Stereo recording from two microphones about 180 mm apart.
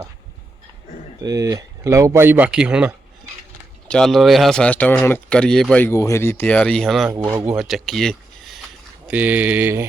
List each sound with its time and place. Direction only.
1.2 s speech: 20° right (ahead or behind); by 8.5 s centre (ahead or behind)
9.0 s speech: 10° right (ahead or behind)